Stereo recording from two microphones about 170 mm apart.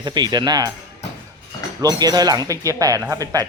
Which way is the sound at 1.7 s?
25° right (ahead or behind).